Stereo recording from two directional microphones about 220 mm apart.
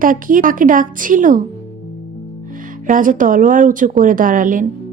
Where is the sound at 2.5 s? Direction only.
40° right (ahead or behind).